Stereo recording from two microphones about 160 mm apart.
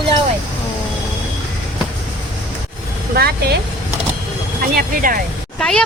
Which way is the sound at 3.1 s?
75° right (ahead or behind).